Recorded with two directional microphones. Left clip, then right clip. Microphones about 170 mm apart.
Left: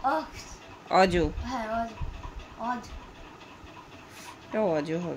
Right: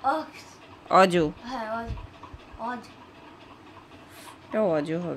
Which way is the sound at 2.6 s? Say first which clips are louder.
Left 1 dB; 20° right (ahead or behind).